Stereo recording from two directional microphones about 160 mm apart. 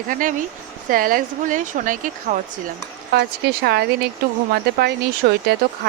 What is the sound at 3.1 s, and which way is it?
Speech, 85° right.